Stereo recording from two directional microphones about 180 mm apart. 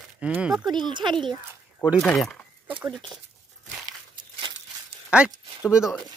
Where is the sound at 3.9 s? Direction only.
25° right (ahead or behind).